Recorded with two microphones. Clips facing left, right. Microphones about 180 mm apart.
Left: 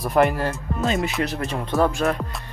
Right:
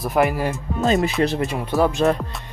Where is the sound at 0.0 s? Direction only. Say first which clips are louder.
Even; centre (ahead or behind).